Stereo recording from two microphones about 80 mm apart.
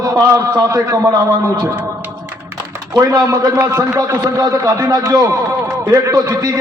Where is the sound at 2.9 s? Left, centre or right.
Right.